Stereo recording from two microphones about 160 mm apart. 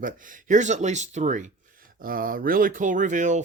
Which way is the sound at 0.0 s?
55° right (ahead or behind).